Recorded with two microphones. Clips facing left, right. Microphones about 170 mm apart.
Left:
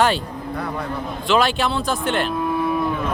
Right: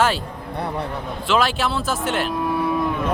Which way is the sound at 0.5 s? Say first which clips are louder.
Right 2 dB; 30° right (ahead or behind).